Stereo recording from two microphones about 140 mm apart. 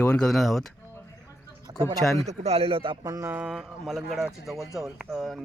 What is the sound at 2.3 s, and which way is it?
Speech, 50° right (ahead or behind).